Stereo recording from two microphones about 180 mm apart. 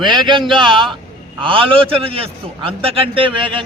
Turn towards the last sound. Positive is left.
turn(degrees=-30)  # may be behind; listen again after turning